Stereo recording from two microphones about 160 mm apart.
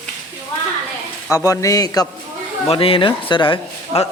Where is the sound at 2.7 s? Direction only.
35° left (ahead or behind).